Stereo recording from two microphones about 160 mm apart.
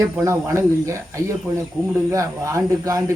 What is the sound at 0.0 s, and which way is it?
Speech, 20° right (ahead or behind).